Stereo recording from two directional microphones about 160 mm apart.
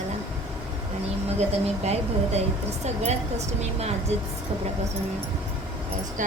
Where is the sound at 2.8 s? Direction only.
45° right (ahead or behind).